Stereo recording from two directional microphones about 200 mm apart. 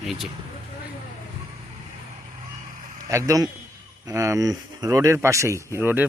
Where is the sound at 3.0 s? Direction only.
15° right (ahead or behind).